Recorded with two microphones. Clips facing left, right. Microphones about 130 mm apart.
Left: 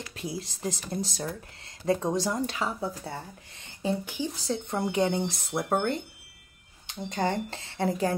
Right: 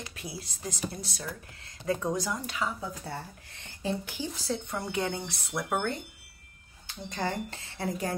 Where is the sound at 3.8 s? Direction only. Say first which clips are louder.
Left 3 dB; 15° left (ahead or behind).